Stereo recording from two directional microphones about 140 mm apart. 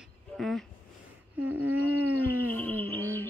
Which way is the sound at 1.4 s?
10° right (ahead or behind).